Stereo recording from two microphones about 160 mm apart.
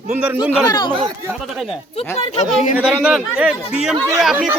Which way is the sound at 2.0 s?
40° left (ahead or behind).